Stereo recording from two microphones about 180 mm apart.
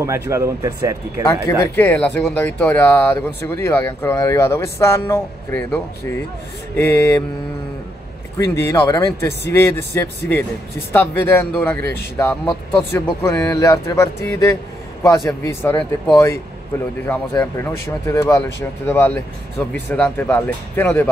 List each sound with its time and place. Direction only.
0.0 s speech: 15° right (ahead or behind)
1.2 s speech: 15° left (ahead or behind)
8.4 s speech: 15° left (ahead or behind)
17.0 s speech: 10° left (ahead or behind)